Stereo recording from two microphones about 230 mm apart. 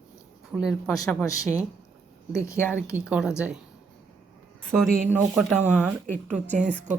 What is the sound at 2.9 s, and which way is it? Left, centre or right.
Speech, centre.